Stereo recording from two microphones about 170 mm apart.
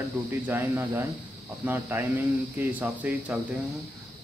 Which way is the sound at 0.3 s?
15° right (ahead or behind).